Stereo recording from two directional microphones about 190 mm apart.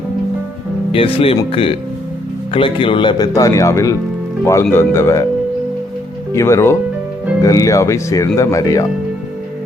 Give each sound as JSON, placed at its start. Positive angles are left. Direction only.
{"t": 0.9, "sound": "speech", "side_deg": 30}
{"t": 6.3, "sound": "speech", "side_deg": 15}